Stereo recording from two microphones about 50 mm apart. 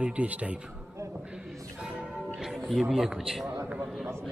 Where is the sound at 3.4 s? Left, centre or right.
Right.